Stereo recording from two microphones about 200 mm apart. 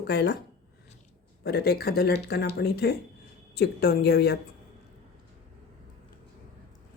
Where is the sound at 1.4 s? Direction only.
50° left (ahead or behind).